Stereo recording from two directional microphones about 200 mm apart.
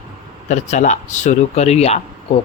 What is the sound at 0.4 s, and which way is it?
Speech, 35° left (ahead or behind).